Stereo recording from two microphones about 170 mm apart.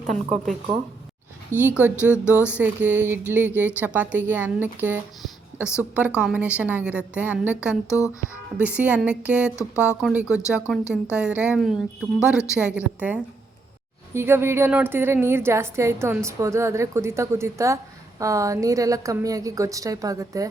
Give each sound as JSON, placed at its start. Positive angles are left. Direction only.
{"t": 1.7, "sound": "a woman's voice", "side_deg": -10}
{"t": 7.9, "sound": "speech", "side_deg": 20}
{"t": 8.5, "sound": "a woman's voice", "side_deg": -10}